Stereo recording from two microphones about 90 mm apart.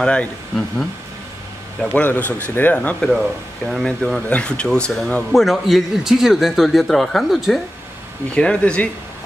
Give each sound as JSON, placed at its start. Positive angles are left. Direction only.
{"t": 0.0, "sound": "speech", "side_deg": 10}
{"t": 1.9, "sound": "speech", "side_deg": 15}
{"t": 3.0, "sound": "speech", "side_deg": 0}
{"t": 5.3, "sound": "a man's voice", "side_deg": 0}
{"t": 8.4, "sound": "speech", "side_deg": 10}